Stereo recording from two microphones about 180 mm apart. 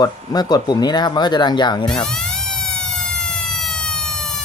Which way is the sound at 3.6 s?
5° left (ahead or behind).